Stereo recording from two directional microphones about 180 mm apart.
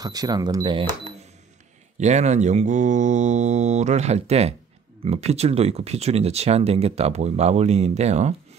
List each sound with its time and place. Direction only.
0.0 s speech: 20° right (ahead or behind)
2.0 s speech: 40° right (ahead or behind)